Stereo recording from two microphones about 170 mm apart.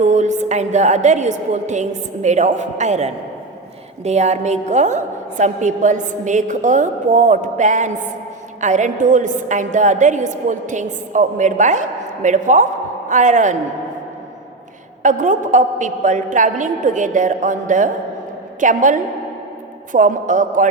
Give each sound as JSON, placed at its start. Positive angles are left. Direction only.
{"t": 0.0, "sound": "a woman's voice", "side_deg": -45}
{"t": 15.0, "sound": "a woman's voice", "side_deg": -45}